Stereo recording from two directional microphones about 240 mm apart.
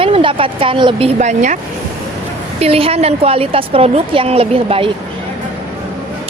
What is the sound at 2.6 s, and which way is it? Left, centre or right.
A woman's voice, right.